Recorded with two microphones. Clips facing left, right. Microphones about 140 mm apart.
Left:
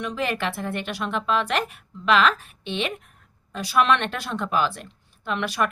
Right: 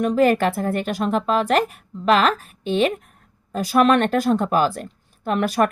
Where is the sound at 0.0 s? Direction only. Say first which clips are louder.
Right 10 dB; 45° right (ahead or behind).